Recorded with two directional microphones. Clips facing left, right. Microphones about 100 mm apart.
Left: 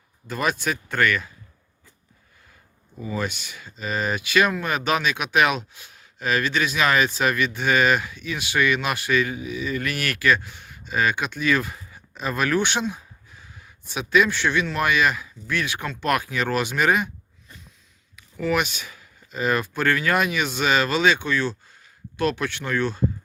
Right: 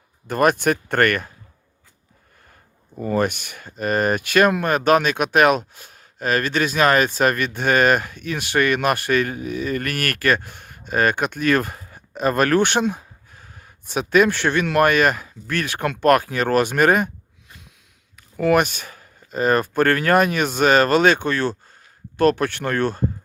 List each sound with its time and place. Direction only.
0.3 s speech: 55° right (ahead or behind)
3.0 s speech: 60° right (ahead or behind)
18.2 s speech: 50° right (ahead or behind)